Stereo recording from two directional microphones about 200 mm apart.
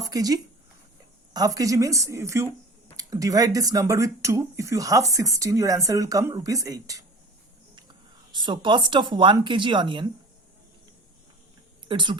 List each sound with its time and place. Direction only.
0.0 s speech: 20° right (ahead or behind)
8.3 s speech: 25° right (ahead or behind)
11.9 s speech: 25° right (ahead or behind)